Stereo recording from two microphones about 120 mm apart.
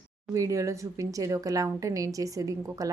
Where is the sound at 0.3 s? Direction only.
30° right (ahead or behind).